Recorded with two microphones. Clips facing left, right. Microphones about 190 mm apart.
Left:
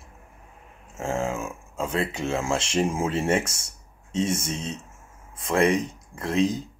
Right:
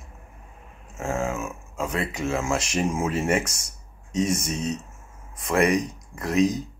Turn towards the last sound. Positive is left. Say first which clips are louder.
# right 2 dB
turn(degrees=30)  # may be behind; listen again after turning